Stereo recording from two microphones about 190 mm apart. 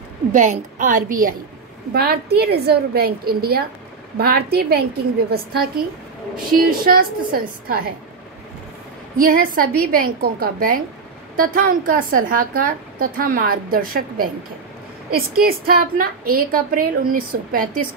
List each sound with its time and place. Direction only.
0.3 s a woman's voice: 40° right (ahead or behind)
9.1 s a woman's voice: 50° right (ahead or behind)